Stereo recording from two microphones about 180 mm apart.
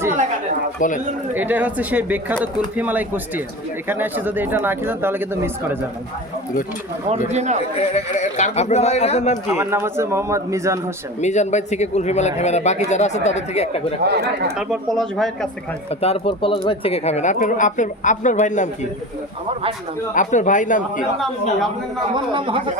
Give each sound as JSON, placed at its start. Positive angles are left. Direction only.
{"t": 0.8, "sound": "speech", "side_deg": 45}
{"t": 1.3, "sound": "speech", "side_deg": -10}
{"t": 7.3, "sound": "a man's voice", "side_deg": -40}
{"t": 7.8, "sound": "speech", "side_deg": 40}
{"t": 9.5, "sound": "speech", "side_deg": -15}
{"t": 11.2, "sound": "speech", "side_deg": 40}
{"t": 14.0, "sound": "speech", "side_deg": -65}
{"t": 14.5, "sound": "speech", "side_deg": 0}
{"t": 15.9, "sound": "speech", "side_deg": 35}
{"t": 20.1, "sound": "speech", "side_deg": 45}
{"t": 22.1, "sound": "speech", "side_deg": -25}